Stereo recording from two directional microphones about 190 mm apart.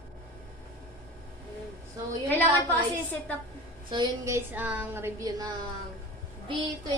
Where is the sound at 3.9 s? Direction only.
20° right (ahead or behind).